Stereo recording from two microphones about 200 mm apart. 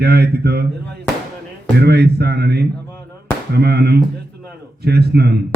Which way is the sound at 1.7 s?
55° right (ahead or behind).